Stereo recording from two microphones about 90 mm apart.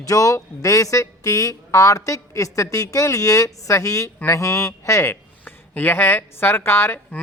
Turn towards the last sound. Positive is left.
turn(degrees=25)  # may be behind; listen again after turning